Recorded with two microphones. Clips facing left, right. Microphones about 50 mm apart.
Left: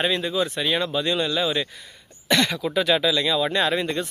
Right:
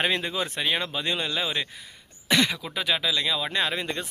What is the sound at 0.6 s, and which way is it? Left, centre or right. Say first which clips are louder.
Speech: left 4 dB; centre.